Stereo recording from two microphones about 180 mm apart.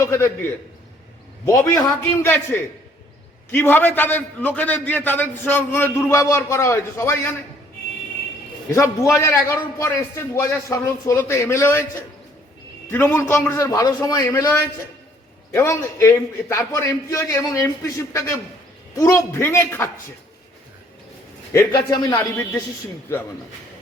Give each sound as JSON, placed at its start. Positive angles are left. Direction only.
{"t": 0.0, "sound": "a man's voice", "side_deg": 15}
{"t": 8.7, "sound": "a man's voice", "side_deg": 15}
{"t": 21.5, "sound": "a man's voice", "side_deg": 15}